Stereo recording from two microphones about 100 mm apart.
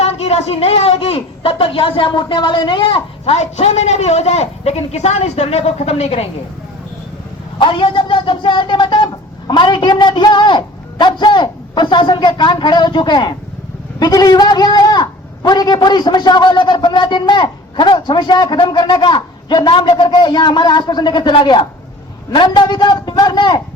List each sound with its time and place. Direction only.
0.0 s a woman's voice: 90° left
7.6 s a man's voice: 55° left (ahead or behind)